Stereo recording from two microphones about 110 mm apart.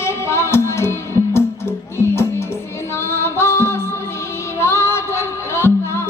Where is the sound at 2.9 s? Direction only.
25° left (ahead or behind).